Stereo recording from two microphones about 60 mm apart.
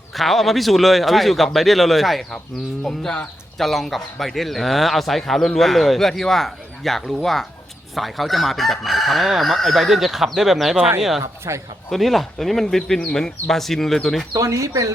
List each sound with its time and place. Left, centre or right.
0.1 s a man's voice: centre
2.8 s speech: centre
3.6 s a man's voice: centre
11.5 s a man's voice: right
11.9 s a man's voice: centre
14.3 s speech: right